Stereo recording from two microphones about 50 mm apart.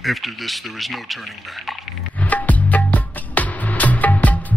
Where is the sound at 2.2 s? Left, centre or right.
Left.